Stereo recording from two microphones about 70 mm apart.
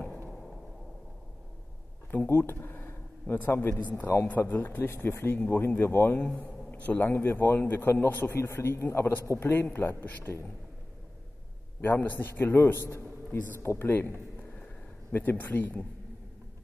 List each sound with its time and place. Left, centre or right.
2.0 s a man's voice: left
11.8 s a man's voice: left